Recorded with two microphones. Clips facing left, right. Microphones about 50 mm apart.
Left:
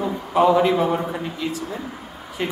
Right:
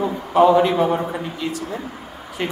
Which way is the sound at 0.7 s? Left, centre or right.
Centre.